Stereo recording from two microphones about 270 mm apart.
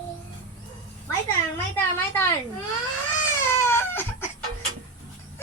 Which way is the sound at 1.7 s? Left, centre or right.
Centre.